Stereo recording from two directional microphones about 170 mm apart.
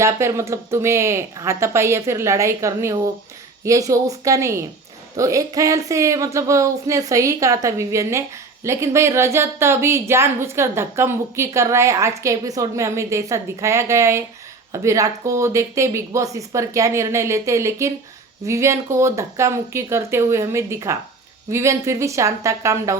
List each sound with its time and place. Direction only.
0.0 s speech: 15° right (ahead or behind)